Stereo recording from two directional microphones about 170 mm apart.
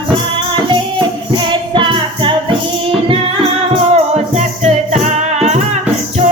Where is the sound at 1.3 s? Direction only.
30° right (ahead or behind).